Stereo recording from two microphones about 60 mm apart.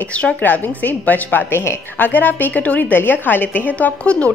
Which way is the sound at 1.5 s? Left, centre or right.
Left.